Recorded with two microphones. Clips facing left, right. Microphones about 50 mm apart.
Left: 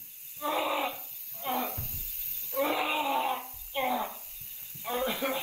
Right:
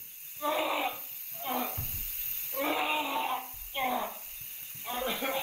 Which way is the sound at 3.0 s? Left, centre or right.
Left.